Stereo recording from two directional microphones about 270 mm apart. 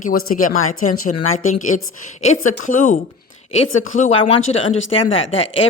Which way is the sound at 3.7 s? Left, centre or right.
Left.